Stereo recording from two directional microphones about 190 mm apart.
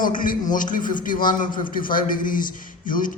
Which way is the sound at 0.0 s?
45° left (ahead or behind).